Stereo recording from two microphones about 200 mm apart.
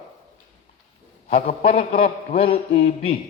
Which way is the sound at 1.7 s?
30° left (ahead or behind).